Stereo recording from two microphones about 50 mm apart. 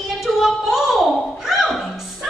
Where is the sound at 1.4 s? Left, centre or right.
Centre.